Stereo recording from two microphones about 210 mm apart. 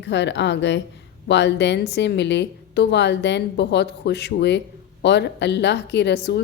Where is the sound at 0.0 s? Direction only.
55° left (ahead or behind).